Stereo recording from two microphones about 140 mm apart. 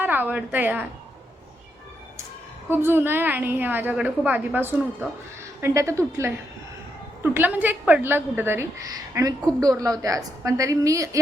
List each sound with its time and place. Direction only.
0.0 s a woman's voice: 15° right (ahead or behind)
2.6 s a woman's voice: 15° right (ahead or behind)
7.2 s a woman's voice: 15° right (ahead or behind)